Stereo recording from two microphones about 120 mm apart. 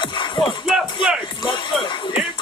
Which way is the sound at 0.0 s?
45° left (ahead or behind).